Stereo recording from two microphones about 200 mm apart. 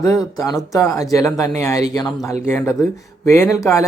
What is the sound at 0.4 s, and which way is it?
A man's voice, 15° left (ahead or behind).